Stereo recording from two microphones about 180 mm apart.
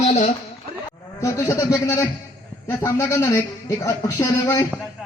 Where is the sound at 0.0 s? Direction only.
35° left (ahead or behind).